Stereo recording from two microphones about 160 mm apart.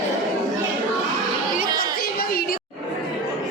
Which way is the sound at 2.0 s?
65° left (ahead or behind).